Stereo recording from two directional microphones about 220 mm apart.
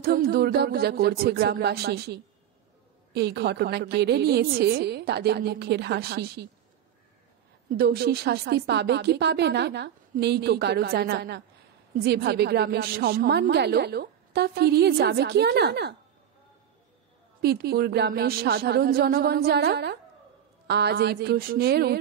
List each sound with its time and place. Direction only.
0.0 s a woman's voice: 40° right (ahead or behind)
7.7 s a woman's voice: 45° right (ahead or behind)
17.4 s a woman's voice: 45° right (ahead or behind)